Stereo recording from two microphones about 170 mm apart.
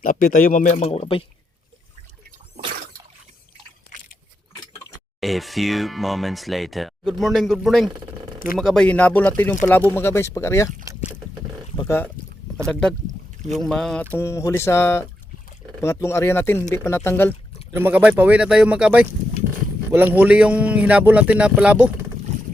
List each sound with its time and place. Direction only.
0.0 s speech: 55° left (ahead or behind); by 1.2 s 35° left (ahead or behind)
5.2 s speech: centre (ahead or behind); by 10.7 s 15° left (ahead or behind)
13.5 s speech: centre (ahead or behind)
17.7 s a man's voice: 10° right (ahead or behind)